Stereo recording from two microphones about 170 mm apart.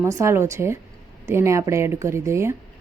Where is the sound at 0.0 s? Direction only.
20° right (ahead or behind).